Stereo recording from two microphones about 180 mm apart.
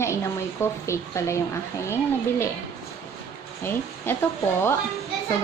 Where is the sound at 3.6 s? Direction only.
10° left (ahead or behind).